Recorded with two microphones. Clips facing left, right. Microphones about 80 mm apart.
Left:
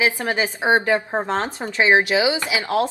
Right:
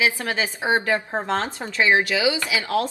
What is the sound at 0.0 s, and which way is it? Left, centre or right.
A woman's voice, left.